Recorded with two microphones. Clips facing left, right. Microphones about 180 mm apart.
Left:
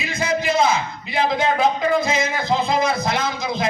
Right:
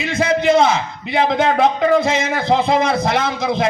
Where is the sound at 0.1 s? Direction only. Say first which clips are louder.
Right 7 dB; 70° right (ahead or behind).